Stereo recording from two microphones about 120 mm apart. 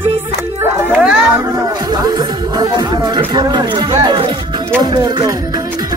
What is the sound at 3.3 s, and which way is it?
Speech, 35° right (ahead or behind).